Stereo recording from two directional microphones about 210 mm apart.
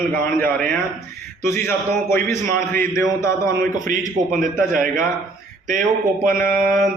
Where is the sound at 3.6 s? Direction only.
40° right (ahead or behind).